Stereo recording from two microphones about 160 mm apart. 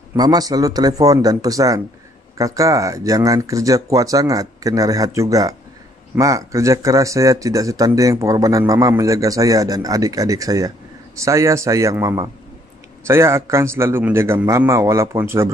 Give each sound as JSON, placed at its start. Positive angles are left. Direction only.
{"t": 0.1, "sound": "a man's voice", "side_deg": -25}